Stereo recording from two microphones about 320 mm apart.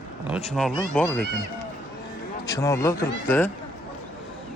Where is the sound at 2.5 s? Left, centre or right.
Centre.